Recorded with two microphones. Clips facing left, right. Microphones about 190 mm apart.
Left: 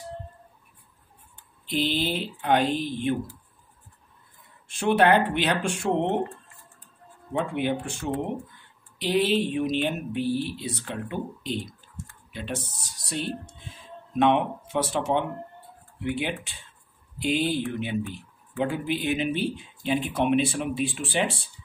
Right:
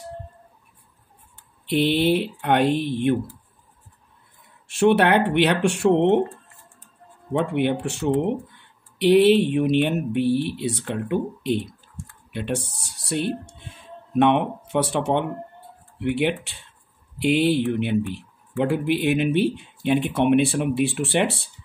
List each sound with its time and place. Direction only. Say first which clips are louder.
1.7 s speech: right 7 dB; 65° right (ahead or behind)
4.6 s speech: right 3 dB; 65° right (ahead or behind)
7.5 s speech: right 5 dB; 65° right (ahead or behind)